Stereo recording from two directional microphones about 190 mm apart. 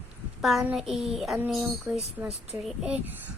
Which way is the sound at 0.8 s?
Centre (ahead or behind).